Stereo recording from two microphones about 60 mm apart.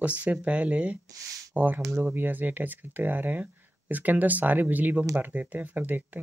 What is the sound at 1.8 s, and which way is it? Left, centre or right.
Speech, right.